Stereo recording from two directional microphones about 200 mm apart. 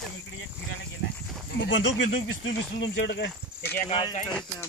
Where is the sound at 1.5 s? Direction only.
65° left (ahead or behind).